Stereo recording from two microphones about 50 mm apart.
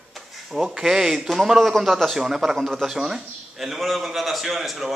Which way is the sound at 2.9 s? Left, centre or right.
Centre.